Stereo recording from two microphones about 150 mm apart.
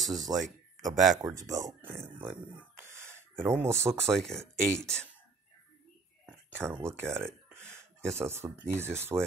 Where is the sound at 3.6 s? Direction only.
15° right (ahead or behind).